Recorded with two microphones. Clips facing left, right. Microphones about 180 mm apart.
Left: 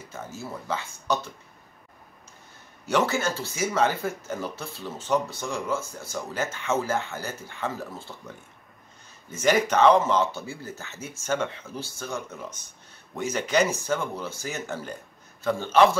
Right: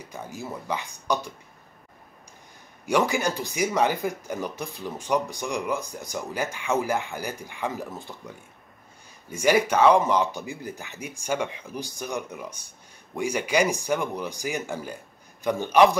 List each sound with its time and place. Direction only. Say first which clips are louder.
0.0 s speech: right 1 dB; 15° right (ahead or behind)
2.9 s speech: right 1 dB; 15° right (ahead or behind)
9.3 s speech: right 1 dB; 10° right (ahead or behind)